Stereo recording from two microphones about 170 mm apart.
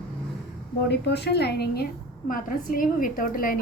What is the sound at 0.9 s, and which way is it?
A woman's voice, 75° left (ahead or behind).